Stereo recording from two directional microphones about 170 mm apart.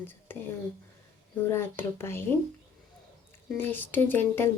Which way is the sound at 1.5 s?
15° left (ahead or behind).